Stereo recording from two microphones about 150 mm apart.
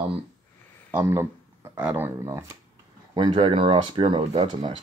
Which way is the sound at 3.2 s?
30° right (ahead or behind).